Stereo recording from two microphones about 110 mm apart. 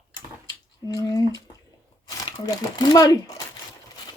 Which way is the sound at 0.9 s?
35° left (ahead or behind).